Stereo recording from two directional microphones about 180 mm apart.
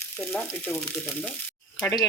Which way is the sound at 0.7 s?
10° left (ahead or behind).